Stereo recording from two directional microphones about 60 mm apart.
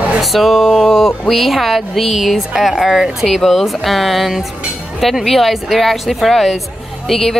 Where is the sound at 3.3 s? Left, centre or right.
Centre.